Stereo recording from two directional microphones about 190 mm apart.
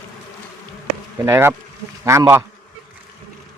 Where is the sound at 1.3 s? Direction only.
10° right (ahead or behind).